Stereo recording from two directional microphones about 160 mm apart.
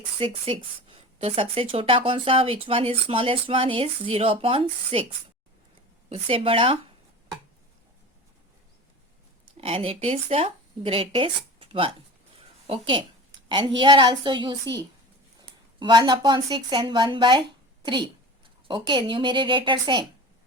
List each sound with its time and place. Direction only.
0.2 s a woman's voice: 35° right (ahead or behind)
9.6 s a woman's voice: 35° right (ahead or behind)
18.7 s a woman's voice: 30° right (ahead or behind)